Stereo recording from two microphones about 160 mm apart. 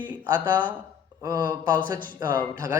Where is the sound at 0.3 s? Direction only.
25° right (ahead or behind).